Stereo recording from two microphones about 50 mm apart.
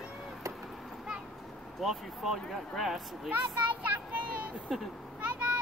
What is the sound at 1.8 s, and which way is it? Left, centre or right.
Speech, centre.